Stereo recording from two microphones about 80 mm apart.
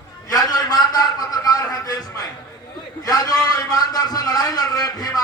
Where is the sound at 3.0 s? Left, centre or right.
Left.